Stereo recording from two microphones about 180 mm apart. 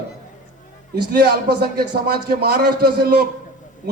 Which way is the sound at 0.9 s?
60° right (ahead or behind).